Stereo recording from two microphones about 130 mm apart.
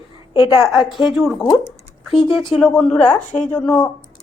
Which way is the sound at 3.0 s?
70° left (ahead or behind).